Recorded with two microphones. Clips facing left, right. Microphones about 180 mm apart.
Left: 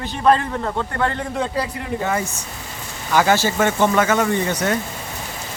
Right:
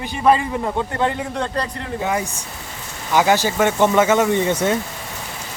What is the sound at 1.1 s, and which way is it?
Speech, centre (ahead or behind).